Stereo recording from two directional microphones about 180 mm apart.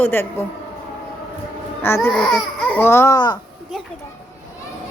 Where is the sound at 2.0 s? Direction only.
5° left (ahead or behind); by 3.3 s 20° left (ahead or behind).